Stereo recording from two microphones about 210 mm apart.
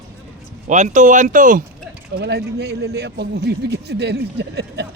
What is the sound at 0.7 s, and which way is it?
Speech, 35° right (ahead or behind).